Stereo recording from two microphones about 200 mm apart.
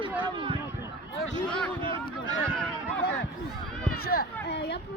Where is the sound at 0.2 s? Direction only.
25° right (ahead or behind).